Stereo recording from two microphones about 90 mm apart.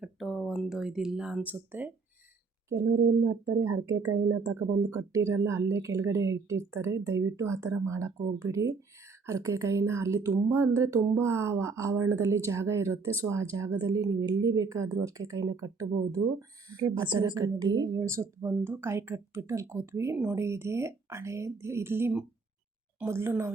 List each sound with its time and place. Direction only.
0.0 s a sound: centre (ahead or behind)
0.8 s speech: 5° right (ahead or behind)
2.6 s speech: 30° right (ahead or behind); by 18.0 s 50° right (ahead or behind)
18.0 s speech: 35° right (ahead or behind)